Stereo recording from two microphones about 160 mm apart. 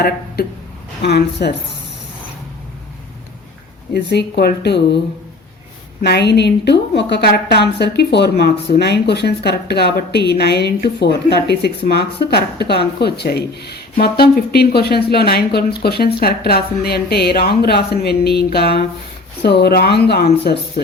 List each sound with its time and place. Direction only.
0.4 s speech: 75° left (ahead or behind)
1.0 s a woman's voice: 90° left
3.9 s a woman's voice: 90° left
6.0 s a woman's voice: 90° left